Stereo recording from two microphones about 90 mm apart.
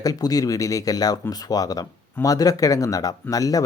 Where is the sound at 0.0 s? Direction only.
45° left (ahead or behind).